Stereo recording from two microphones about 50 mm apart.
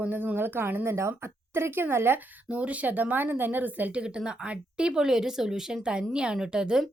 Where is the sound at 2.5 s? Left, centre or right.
Right.